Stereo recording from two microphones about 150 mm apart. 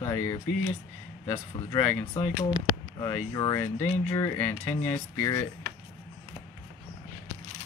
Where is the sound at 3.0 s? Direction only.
25° left (ahead or behind).